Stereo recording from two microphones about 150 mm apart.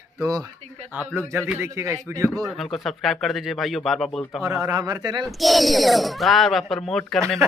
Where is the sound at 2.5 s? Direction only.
Centre (ahead or behind).